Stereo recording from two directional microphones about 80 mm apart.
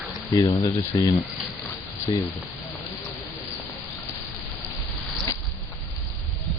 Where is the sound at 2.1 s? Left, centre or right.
Left.